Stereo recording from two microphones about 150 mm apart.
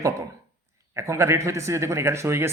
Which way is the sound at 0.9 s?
20° right (ahead or behind).